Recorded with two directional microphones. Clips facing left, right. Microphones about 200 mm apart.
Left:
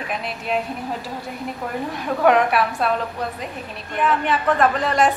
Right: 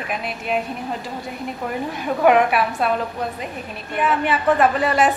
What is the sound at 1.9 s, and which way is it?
A woman's voice, 5° right (ahead or behind).